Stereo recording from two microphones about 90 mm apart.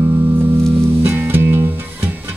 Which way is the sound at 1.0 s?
25° right (ahead or behind).